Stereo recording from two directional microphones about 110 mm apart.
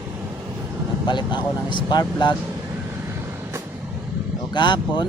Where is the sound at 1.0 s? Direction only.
45° left (ahead or behind).